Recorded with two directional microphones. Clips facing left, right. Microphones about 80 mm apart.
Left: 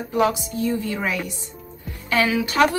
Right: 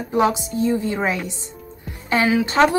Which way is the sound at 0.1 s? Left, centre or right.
Right.